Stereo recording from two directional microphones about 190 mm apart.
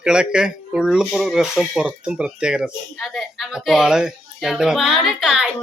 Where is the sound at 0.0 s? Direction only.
5° right (ahead or behind).